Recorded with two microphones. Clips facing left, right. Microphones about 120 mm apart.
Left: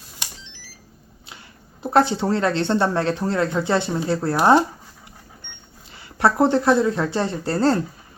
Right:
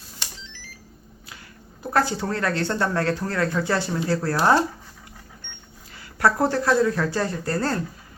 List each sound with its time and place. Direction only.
1.8 s speech: 25° left (ahead or behind)
6.1 s speech: 20° left (ahead or behind)